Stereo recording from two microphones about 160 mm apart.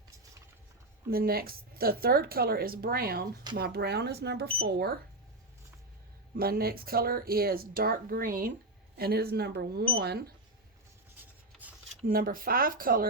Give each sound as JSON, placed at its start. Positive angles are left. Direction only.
{"t": 1.1, "sound": "speech", "side_deg": -70}
{"t": 3.5, "sound": "speech", "side_deg": -80}
{"t": 6.3, "sound": "speech", "side_deg": -70}
{"t": 9.0, "sound": "speech", "side_deg": -75}
{"t": 12.0, "sound": "speech", "side_deg": -60}